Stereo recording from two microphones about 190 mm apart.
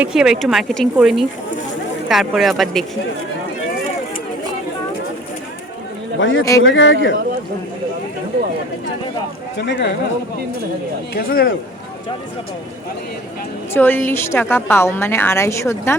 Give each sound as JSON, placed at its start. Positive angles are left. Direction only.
{"t": 0.0, "sound": "speech", "side_deg": -5}
{"t": 6.1, "sound": "a man's voice", "side_deg": 90}
{"t": 6.6, "sound": "speech", "side_deg": 80}
{"t": 9.6, "sound": "speech", "side_deg": 65}
{"t": 11.1, "sound": "speech", "side_deg": 50}
{"t": 13.7, "sound": "a woman's voice", "side_deg": 10}